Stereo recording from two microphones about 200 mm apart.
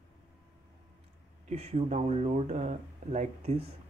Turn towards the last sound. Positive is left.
turn(degrees=-30)  # may be behind; listen again after turning